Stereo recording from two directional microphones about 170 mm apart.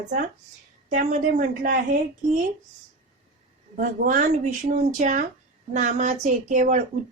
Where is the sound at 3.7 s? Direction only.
50° right (ahead or behind).